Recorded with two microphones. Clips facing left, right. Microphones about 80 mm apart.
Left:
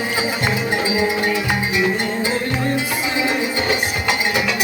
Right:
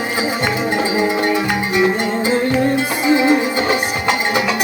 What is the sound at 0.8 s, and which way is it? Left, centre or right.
Music, right.